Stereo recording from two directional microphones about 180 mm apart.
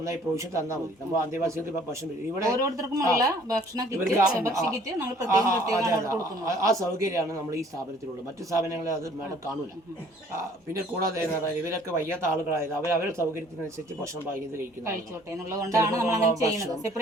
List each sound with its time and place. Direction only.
0.0 s speech: 15° right (ahead or behind)
10.8 s speech: 15° right (ahead or behind)
15.4 s speech: 20° right (ahead or behind)